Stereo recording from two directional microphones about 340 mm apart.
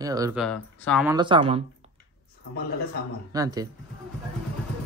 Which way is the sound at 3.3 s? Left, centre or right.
Centre.